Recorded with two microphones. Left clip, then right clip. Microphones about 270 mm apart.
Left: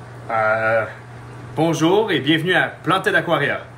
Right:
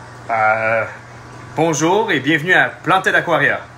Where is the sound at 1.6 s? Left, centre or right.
Centre.